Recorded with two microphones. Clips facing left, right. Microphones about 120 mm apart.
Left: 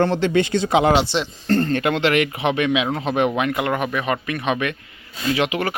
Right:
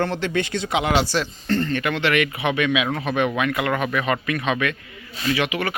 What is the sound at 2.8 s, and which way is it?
Speech, 25° left (ahead or behind).